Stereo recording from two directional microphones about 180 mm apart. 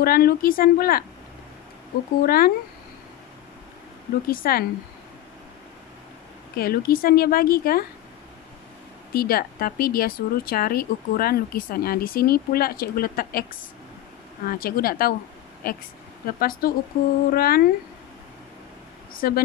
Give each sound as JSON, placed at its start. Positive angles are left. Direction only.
{"t": 0.0, "sound": "speech", "side_deg": 55}
{"t": 2.2, "sound": "speech", "side_deg": 55}
{"t": 4.3, "sound": "speech", "side_deg": 55}
{"t": 6.5, "sound": "speech", "side_deg": 55}
{"t": 9.1, "sound": "speech", "side_deg": 55}
{"t": 19.1, "sound": "speech", "side_deg": 55}